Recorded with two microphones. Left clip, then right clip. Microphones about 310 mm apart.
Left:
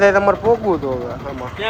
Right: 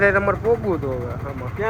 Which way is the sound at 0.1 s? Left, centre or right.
Left.